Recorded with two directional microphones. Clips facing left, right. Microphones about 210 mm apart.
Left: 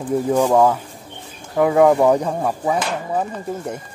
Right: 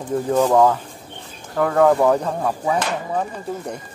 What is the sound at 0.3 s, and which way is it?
Speech, 10° left (ahead or behind).